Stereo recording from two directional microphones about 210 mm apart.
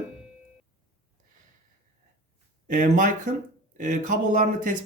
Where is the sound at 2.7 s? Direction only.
40° right (ahead or behind).